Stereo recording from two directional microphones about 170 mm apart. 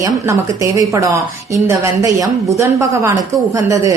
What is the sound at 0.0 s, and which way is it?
A woman's voice, 20° right (ahead or behind).